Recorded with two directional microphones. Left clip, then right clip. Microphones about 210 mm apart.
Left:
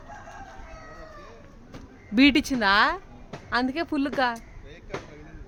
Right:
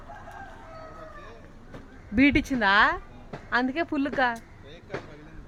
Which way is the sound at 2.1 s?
15° left (ahead or behind).